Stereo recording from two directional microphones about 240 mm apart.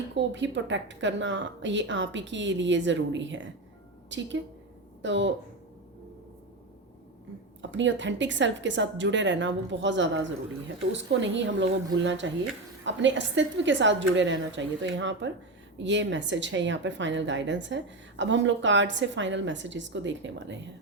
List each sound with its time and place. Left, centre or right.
0.2 s a woman's voice: right
7.6 s a woman's voice: right